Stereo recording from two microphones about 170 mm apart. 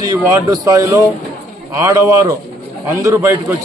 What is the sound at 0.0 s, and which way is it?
A man's voice, 20° right (ahead or behind).